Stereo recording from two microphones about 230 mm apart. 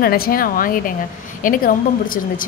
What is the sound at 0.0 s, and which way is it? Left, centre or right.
Speech, left.